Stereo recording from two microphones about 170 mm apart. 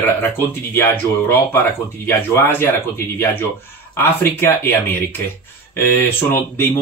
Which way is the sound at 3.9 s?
15° left (ahead or behind).